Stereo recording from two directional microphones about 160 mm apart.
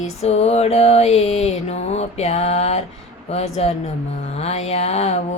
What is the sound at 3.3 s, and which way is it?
Speech, 40° left (ahead or behind).